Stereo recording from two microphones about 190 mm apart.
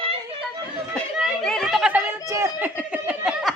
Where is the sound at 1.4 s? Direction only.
Centre (ahead or behind).